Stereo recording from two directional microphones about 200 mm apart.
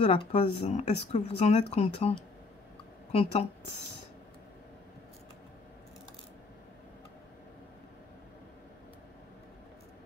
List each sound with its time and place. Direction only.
0.0 s a woman's voice: 30° left (ahead or behind)